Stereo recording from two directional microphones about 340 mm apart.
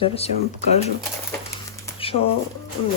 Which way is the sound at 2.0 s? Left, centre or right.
Centre.